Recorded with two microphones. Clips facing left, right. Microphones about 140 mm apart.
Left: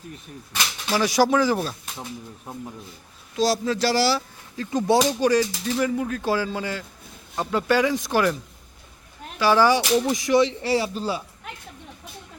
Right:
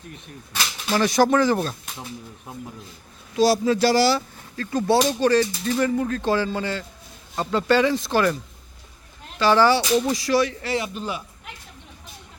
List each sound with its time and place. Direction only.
0.5 s speech: 10° left (ahead or behind)
3.3 s speech: 5° right (ahead or behind)
4.5 s speech: 15° left (ahead or behind)
9.4 s speech: 10° left (ahead or behind); by 11.2 s 30° left (ahead or behind)